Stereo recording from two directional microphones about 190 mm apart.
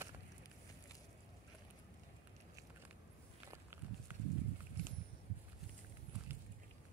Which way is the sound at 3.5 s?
15° right (ahead or behind).